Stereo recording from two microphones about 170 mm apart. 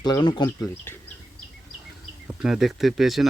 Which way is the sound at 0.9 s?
15° left (ahead or behind).